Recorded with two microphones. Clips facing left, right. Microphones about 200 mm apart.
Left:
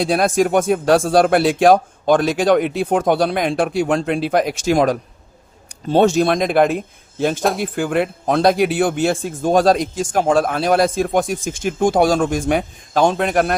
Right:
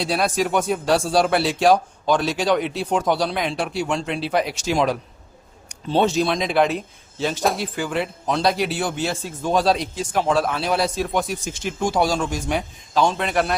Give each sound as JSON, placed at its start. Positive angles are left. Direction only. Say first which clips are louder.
{"t": 0.0, "sound": "speech", "louder": "left 6 dB", "side_deg": 50}